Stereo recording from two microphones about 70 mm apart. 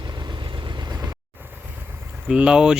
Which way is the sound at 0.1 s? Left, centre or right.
Right.